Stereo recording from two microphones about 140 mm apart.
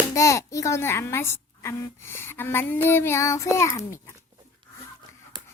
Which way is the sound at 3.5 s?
20° left (ahead or behind).